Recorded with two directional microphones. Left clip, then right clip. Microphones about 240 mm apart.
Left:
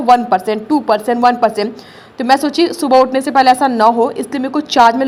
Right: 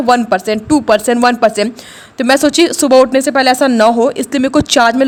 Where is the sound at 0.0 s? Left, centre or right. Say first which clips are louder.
Left 1 dB; right.